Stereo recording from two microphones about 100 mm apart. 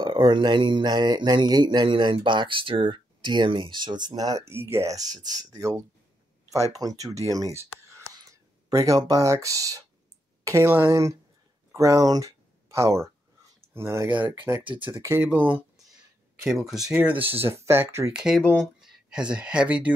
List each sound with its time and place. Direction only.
0.0 s speech: 45° right (ahead or behind)
4.5 s a woman's voice: 25° right (ahead or behind)
14.6 s speech: 55° right (ahead or behind)
14.9 s speech: 25° right (ahead or behind)
16.4 s speech: 5° right (ahead or behind)
16.9 s speech: 15° right (ahead or behind)
18.1 s speech: 5° right (ahead or behind)
18.4 s speech: 10° left (ahead or behind)
18.8 s speech: 5° right (ahead or behind)